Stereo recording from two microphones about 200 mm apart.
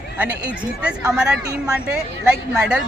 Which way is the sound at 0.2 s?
5° right (ahead or behind).